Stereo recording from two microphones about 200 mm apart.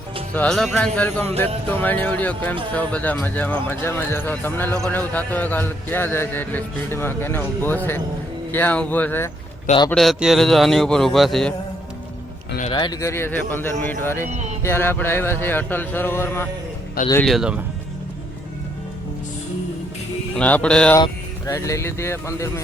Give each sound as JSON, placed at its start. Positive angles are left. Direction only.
{"t": 0.3, "sound": "a man's voice", "side_deg": 5}
{"t": 9.6, "sound": "speech", "side_deg": 25}
{"t": 9.9, "sound": "a man's voice", "side_deg": 0}
{"t": 12.7, "sound": "speech", "side_deg": 20}
{"t": 14.3, "sound": "speech", "side_deg": -35}
{"t": 14.6, "sound": "speech", "side_deg": 10}
{"t": 17.2, "sound": "a man's voice", "side_deg": 0}
{"t": 20.3, "sound": "a man's voice", "side_deg": 5}
{"t": 21.0, "sound": "speech", "side_deg": 15}